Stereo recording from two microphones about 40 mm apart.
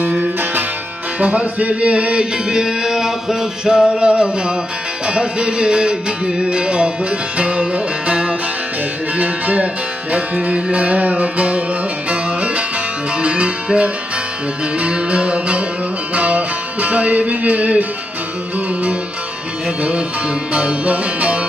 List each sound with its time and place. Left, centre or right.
1.2 s music: right
2.5 s a sound: centre
5.0 s music: right
9.1 s music: right
20.5 s music: right